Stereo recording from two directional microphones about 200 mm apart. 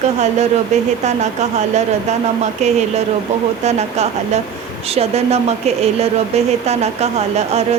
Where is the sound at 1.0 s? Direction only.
35° right (ahead or behind).